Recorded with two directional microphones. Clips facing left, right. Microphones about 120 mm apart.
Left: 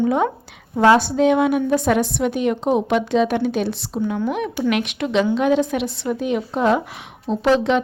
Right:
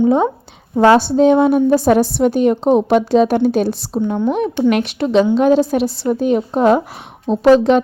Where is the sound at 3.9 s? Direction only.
25° right (ahead or behind).